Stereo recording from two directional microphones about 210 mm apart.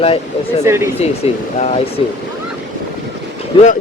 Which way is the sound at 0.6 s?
10° right (ahead or behind).